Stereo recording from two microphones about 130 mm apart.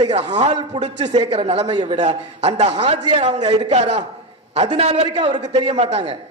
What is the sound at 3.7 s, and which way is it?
A man's voice, 60° right (ahead or behind).